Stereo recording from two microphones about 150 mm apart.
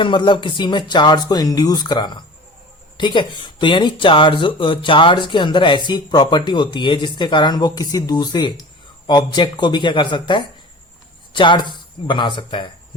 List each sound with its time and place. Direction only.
0.0 s speech: 30° left (ahead or behind)